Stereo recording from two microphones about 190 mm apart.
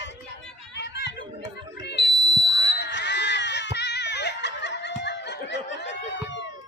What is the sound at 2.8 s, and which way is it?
Ding, 65° left (ahead or behind).